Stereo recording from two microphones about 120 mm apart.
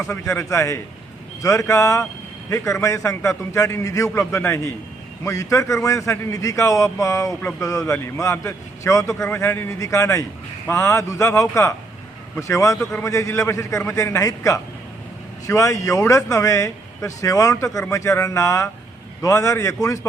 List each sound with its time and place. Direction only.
0.0 s a man's voice: 25° left (ahead or behind)